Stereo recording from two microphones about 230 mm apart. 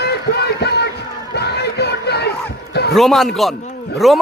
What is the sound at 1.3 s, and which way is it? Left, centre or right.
Crowd, left.